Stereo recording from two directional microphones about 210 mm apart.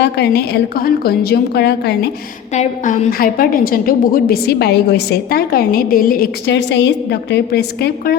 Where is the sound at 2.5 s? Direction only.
35° left (ahead or behind).